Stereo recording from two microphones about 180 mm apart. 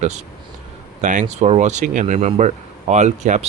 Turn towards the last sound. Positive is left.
turn(degrees=-40)  # may be behind; listen again after turning